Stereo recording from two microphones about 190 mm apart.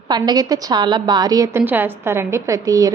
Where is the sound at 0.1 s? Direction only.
20° right (ahead or behind).